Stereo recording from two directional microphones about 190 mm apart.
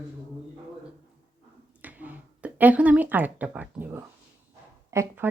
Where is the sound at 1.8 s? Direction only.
10° right (ahead or behind).